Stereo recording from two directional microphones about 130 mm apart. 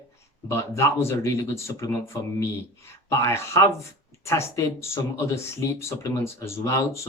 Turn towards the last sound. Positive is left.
turn(degrees=20)  # may be behind; listen again after turning